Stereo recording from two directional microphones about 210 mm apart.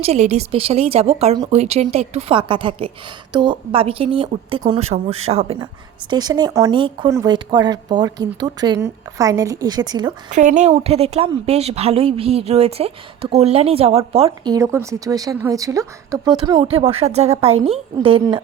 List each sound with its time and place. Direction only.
0.0 s speech: 30° right (ahead or behind)
10.3 s speech: 35° right (ahead or behind)